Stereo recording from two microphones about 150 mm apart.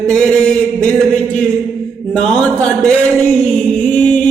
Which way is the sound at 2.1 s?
5° left (ahead or behind).